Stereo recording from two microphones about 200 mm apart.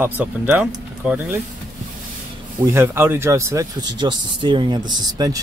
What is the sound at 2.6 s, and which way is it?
Speech, 15° right (ahead or behind).